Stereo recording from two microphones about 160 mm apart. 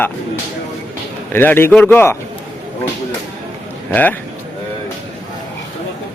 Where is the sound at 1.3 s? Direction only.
10° left (ahead or behind).